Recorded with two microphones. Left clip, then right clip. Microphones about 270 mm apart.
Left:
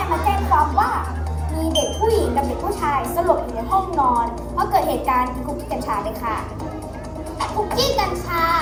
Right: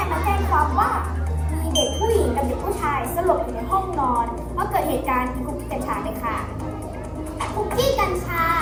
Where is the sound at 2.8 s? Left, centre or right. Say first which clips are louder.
Left 3 dB; left.